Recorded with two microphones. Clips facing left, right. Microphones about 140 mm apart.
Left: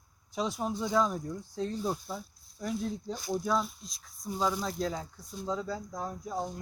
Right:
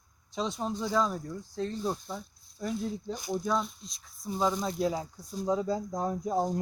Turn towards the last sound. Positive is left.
turn(degrees=-40)  # may be behind; listen again after turning